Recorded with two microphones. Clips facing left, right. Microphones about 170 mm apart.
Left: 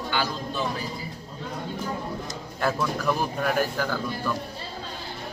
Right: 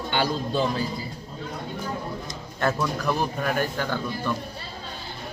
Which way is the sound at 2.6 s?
5° left (ahead or behind).